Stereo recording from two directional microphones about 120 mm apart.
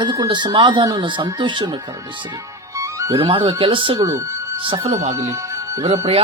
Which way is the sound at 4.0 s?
25° right (ahead or behind).